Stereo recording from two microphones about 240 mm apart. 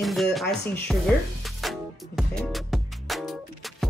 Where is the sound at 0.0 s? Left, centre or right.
Centre.